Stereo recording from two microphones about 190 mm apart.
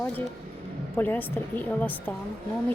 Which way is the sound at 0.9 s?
10° left (ahead or behind).